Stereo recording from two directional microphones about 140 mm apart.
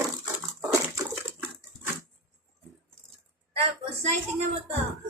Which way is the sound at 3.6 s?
50° right (ahead or behind).